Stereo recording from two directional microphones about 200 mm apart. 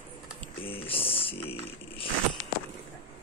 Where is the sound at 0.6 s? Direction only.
25° left (ahead or behind).